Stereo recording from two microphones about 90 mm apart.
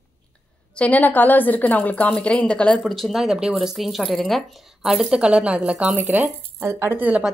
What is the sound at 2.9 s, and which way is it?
Speech, centre (ahead or behind).